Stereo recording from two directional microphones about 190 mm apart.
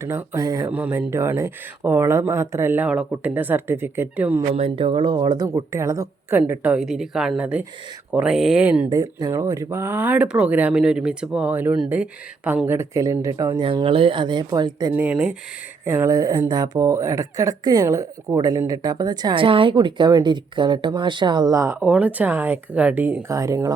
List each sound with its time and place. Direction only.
0.0 s speech: 15° right (ahead or behind)
4.5 s speech: 30° right (ahead or behind); by 8.9 s 5° right (ahead or behind)
8.9 s speech: 20° right (ahead or behind)
14.9 s speech: 5° right (ahead or behind)